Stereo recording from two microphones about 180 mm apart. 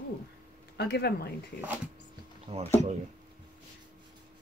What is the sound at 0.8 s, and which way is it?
Speech, 65° left (ahead or behind).